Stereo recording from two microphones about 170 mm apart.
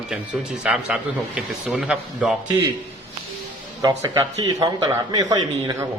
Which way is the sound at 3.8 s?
20° right (ahead or behind).